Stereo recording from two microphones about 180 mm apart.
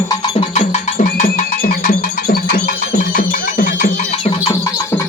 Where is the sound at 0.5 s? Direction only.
45° left (ahead or behind).